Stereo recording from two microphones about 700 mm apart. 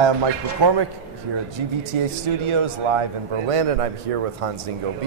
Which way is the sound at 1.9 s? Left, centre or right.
Right.